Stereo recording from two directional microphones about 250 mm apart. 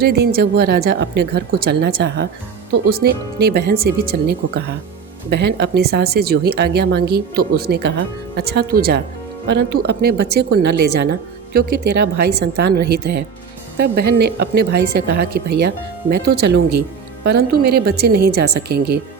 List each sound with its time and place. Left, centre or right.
0.0 s speech: right